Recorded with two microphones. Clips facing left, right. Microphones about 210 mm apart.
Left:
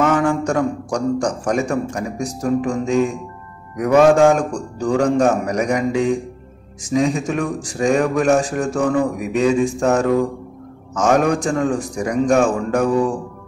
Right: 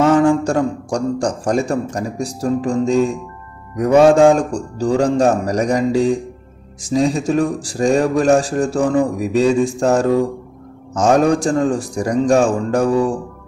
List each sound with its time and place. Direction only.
0.0 s speech: 30° right (ahead or behind)